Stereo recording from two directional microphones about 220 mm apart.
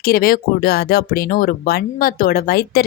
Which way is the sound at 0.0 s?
40° left (ahead or behind).